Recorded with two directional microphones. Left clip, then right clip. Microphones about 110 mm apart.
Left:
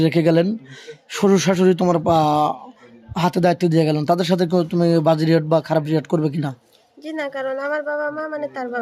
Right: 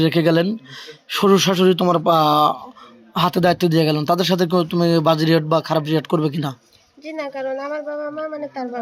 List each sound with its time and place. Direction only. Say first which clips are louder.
0.0 s speech: even; 25° left (ahead or behind)
7.0 s speech: left 1 dB; 35° left (ahead or behind)